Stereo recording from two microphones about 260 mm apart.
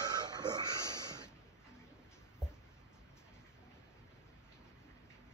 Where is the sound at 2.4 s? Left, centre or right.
Centre.